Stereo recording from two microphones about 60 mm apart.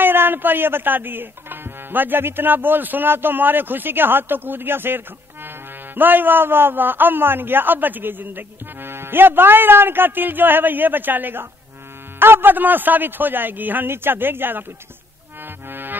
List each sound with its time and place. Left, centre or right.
0.0 s speech: right
15.4 s music: right